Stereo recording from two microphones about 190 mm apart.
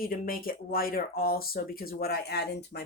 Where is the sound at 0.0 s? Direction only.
50° left (ahead or behind).